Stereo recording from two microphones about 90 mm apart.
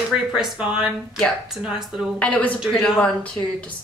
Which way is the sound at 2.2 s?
15° left (ahead or behind).